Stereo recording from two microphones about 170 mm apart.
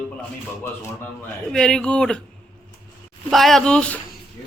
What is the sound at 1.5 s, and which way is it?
Speech, 5° left (ahead or behind).